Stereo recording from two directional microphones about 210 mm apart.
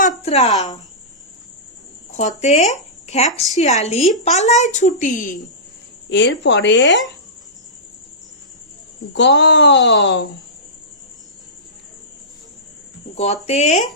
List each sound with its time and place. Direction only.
0.2 s a woman's voice: 30° left (ahead or behind)
2.1 s a woman's voice: 35° left (ahead or behind)
6.1 s speech: 60° left (ahead or behind)
9.1 s speech: 60° left (ahead or behind)
13.1 s a woman's voice: 30° left (ahead or behind)